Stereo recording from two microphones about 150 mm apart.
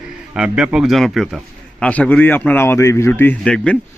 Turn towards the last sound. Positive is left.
turn(degrees=5)  # may be behind; listen again after turning